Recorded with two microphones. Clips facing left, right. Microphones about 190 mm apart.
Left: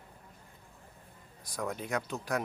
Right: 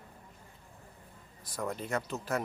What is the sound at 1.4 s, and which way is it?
Speech, centre (ahead or behind).